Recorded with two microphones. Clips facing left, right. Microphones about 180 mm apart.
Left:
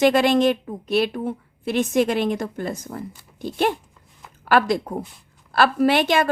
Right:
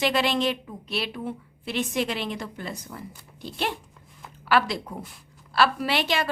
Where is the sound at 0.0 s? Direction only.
50° left (ahead or behind).